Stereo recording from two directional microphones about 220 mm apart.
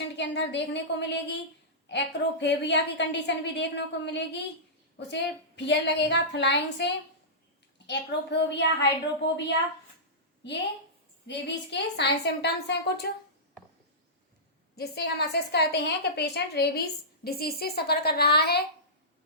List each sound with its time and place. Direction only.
0.2 s a woman's voice: 55° left (ahead or behind)
10.4 s a woman's voice: 50° left (ahead or behind)
14.8 s a woman's voice: 45° left (ahead or behind)